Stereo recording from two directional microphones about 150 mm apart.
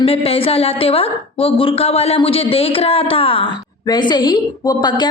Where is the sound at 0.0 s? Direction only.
40° left (ahead or behind).